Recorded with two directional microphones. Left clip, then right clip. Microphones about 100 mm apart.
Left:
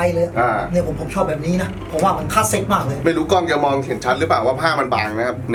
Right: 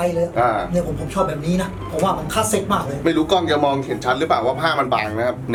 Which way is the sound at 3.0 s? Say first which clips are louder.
Even; 15° right (ahead or behind).